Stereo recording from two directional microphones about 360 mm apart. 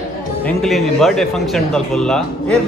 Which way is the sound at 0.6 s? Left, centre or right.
Centre.